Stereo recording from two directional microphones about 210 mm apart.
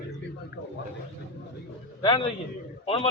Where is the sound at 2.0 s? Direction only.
25° left (ahead or behind).